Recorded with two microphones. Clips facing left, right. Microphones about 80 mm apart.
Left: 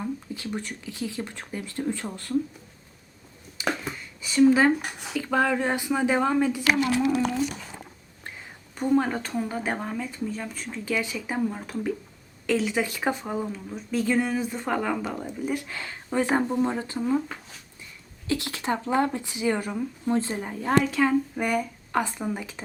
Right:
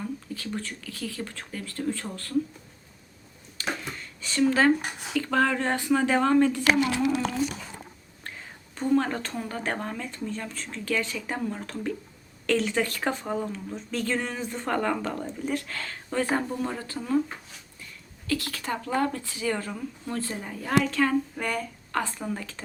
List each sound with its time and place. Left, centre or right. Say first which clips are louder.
0.0 s speech: left 2 dB; centre
3.6 s a sound: left 4 dB; centre
5.1 s speech: even; centre
8.7 s speech: left 1 dB; centre
18.3 s speech: left 2 dB; left
20.8 s speech: left 2 dB; centre